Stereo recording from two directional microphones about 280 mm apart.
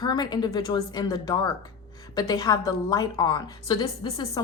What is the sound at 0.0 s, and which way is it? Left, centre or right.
A woman's voice, centre.